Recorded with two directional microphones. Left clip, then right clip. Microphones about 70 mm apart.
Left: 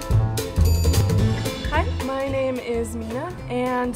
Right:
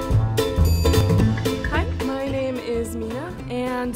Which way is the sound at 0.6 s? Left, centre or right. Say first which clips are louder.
Right 4 dB; centre.